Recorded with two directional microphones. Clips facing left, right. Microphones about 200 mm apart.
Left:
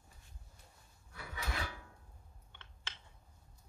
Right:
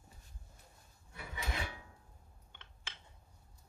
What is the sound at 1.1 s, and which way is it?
Drawer open or close, 20° right (ahead or behind).